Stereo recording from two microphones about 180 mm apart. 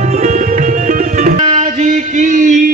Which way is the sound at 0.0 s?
40° right (ahead or behind).